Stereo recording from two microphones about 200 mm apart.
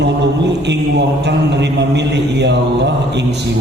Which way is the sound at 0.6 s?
60° right (ahead or behind).